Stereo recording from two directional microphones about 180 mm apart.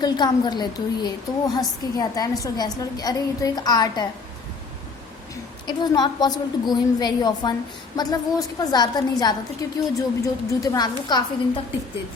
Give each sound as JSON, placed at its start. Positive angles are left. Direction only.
{"t": 0.0, "sound": "a woman's voice", "side_deg": 25}
{"t": 5.6, "sound": "a woman's voice", "side_deg": 25}